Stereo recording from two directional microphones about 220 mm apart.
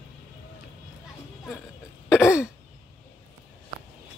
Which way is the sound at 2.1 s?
10° left (ahead or behind).